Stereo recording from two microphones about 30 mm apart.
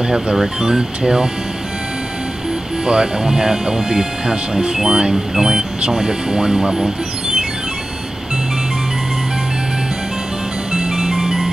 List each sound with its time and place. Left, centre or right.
0.4 s speech: centre
2.8 s speech: right
10.7 s ice cream truck: centre